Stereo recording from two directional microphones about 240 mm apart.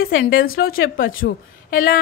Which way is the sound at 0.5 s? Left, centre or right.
Left.